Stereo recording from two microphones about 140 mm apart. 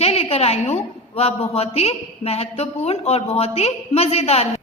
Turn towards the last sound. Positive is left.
turn(degrees=50)  # may be behind; listen again after turning